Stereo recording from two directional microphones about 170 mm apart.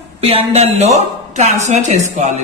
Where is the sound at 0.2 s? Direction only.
35° right (ahead or behind).